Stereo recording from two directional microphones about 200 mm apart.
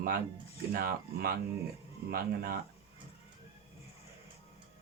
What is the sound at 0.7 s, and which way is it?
Speech, 50° right (ahead or behind).